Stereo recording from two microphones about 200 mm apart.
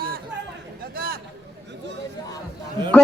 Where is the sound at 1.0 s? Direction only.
50° right (ahead or behind).